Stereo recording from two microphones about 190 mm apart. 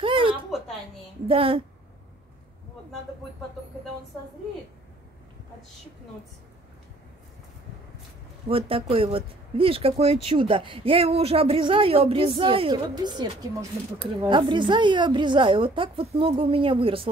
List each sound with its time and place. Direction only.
0.0 s a sound: 25° right (ahead or behind)
1.2 s speech: 30° right (ahead or behind)
8.5 s speech: 30° right (ahead or behind)